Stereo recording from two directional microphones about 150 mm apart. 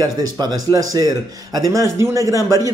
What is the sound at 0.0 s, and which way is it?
Speech, 25° right (ahead or behind).